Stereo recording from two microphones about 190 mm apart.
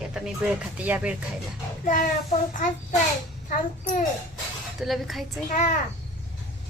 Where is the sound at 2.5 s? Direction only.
40° left (ahead or behind).